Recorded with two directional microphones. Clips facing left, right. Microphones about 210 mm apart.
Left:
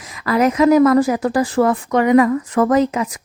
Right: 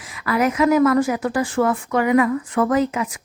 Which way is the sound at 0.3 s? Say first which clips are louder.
Left 4 dB; 35° left (ahead or behind).